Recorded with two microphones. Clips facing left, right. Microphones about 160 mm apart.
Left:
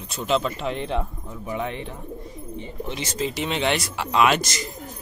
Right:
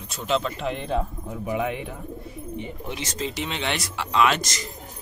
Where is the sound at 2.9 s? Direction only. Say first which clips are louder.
Left 3 dB; 5° left (ahead or behind).